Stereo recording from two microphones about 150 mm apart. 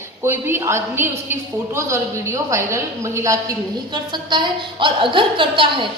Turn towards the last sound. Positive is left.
turn(degrees=-35)  # may be behind; listen again after turning